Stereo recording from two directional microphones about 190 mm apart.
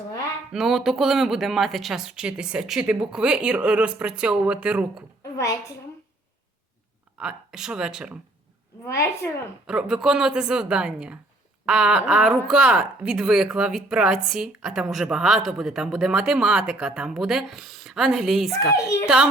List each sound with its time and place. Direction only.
0.5 s speech: centre (ahead or behind)
5.2 s a woman's voice: 15° left (ahead or behind)
7.2 s speech: 5° right (ahead or behind)
8.9 s a woman's voice: 15° left (ahead or behind)
9.6 s speech: 5° right (ahead or behind)